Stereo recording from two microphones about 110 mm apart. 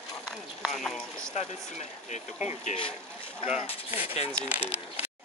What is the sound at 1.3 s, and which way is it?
Speech, 90° left.